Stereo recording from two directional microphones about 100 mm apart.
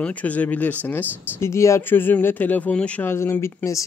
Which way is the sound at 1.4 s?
30° left (ahead or behind).